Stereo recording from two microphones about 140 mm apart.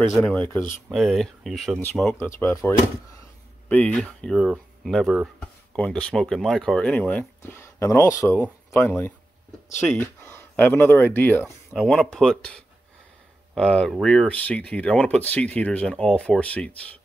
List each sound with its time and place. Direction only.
0.2 s speech: 10° left (ahead or behind)
2.1 s speech: 20° left (ahead or behind); by 5.3 s centre (ahead or behind)
5.8 s speech: 10° left (ahead or behind)
11.4 s speech: centre (ahead or behind)